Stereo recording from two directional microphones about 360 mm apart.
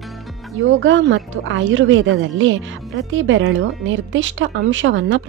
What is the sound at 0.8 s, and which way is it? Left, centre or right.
Speech, right.